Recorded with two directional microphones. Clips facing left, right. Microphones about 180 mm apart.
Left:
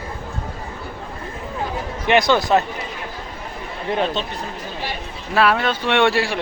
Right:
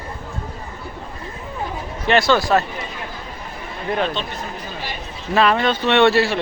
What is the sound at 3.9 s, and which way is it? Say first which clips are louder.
Speech: left 1 dB; 35° left (ahead or behind).